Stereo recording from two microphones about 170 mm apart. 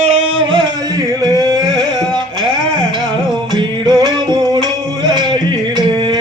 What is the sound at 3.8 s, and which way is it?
Music, 25° right (ahead or behind).